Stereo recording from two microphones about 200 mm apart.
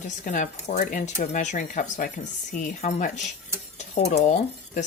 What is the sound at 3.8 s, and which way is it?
Stir, 35° left (ahead or behind).